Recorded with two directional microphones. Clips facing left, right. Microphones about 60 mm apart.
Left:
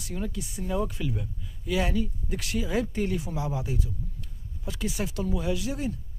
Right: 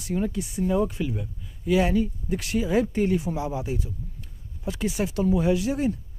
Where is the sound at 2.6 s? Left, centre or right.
Right.